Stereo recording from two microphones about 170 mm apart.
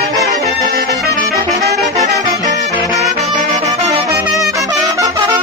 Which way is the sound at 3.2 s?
40° right (ahead or behind).